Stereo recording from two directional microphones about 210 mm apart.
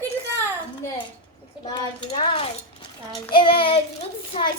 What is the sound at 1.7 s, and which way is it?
Speech, 25° left (ahead or behind).